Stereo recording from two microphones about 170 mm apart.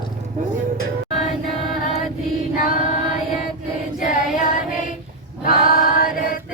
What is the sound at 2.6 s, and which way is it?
Choir, 50° left (ahead or behind).